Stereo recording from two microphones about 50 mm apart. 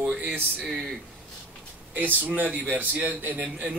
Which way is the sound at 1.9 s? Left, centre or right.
Right.